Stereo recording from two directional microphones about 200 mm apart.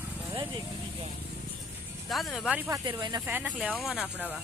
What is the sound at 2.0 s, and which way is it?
Speech, centre (ahead or behind).